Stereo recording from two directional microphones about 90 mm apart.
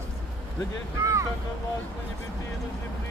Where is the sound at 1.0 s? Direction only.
35° right (ahead or behind).